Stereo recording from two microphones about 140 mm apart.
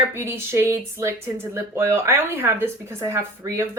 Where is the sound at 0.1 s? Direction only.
15° right (ahead or behind).